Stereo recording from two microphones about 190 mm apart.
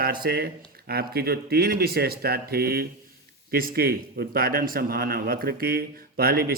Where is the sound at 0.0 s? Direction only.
50° right (ahead or behind).